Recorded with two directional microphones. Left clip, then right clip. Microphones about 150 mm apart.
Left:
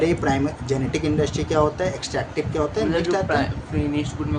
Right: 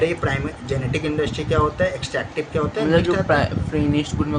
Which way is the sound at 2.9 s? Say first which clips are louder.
Right 3 dB; 80° right.